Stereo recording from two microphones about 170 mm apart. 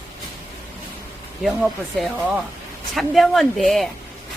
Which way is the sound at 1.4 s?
Centre (ahead or behind).